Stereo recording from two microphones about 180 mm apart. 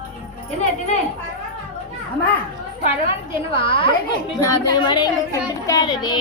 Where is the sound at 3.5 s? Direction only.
30° left (ahead or behind).